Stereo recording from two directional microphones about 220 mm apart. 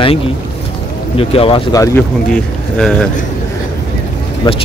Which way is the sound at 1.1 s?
25° left (ahead or behind).